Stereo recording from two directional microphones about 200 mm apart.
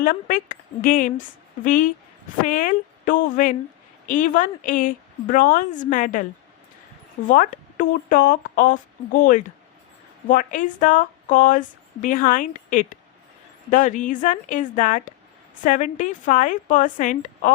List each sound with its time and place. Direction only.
0.0 s a woman's voice: 45° left (ahead or behind)
7.3 s a woman's voice: 40° left (ahead or behind)